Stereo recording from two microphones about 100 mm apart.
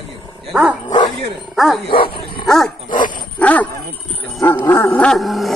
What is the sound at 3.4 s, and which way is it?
Dog, 15° left (ahead or behind).